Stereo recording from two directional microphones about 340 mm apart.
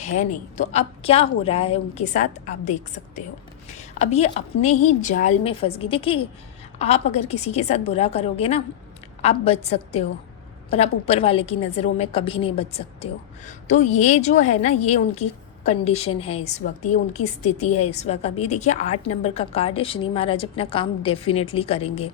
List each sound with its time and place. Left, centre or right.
0.0 s a woman's voice: left